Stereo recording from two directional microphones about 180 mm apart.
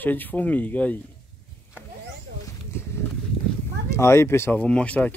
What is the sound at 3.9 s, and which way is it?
Speech, 15° left (ahead or behind).